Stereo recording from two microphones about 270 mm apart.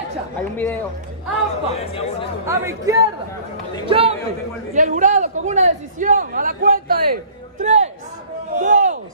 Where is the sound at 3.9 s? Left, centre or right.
Right.